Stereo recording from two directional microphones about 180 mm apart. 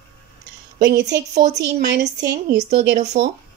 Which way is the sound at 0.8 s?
70° right (ahead or behind).